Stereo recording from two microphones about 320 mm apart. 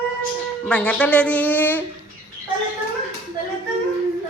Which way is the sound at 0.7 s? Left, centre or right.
Centre.